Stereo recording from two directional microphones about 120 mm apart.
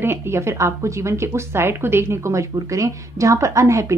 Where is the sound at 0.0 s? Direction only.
20° right (ahead or behind).